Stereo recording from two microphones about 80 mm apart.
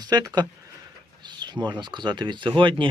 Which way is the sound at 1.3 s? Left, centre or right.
Right.